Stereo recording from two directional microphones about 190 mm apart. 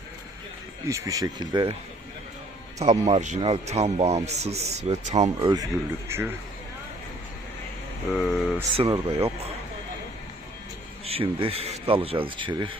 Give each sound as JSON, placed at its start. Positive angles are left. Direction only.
{"t": 0.9, "sound": "speech", "side_deg": -15}
{"t": 2.7, "sound": "speech", "side_deg": -35}
{"t": 6.1, "sound": "a man's voice", "side_deg": -10}
{"t": 8.1, "sound": "speech", "side_deg": 0}
{"t": 8.7, "sound": "speech", "side_deg": -30}
{"t": 11.0, "sound": "speech", "side_deg": -30}